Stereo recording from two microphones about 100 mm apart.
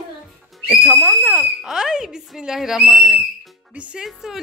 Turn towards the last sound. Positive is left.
turn(degrees=-5)  # may be behind; listen again after turning